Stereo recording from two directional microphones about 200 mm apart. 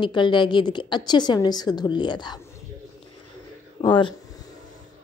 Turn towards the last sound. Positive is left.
turn(degrees=25)  # may be behind; listen again after turning